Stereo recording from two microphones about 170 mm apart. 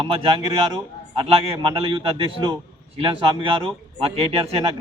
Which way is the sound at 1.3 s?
35° right (ahead or behind).